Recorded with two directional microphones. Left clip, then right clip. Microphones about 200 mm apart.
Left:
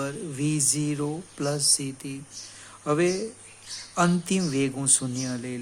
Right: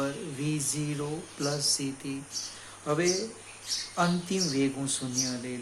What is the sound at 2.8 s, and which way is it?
Speech, 50° left (ahead or behind).